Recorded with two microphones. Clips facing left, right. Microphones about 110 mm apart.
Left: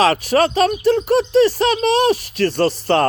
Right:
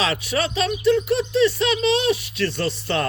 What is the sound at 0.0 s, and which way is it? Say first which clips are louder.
Speech: left 8 dB; 45° left (ahead or behind).